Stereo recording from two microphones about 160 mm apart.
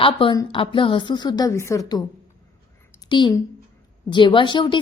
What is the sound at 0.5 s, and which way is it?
A woman's voice, 30° left (ahead or behind).